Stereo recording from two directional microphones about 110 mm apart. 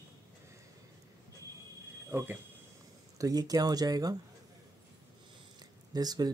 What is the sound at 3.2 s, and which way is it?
Speech, 35° right (ahead or behind).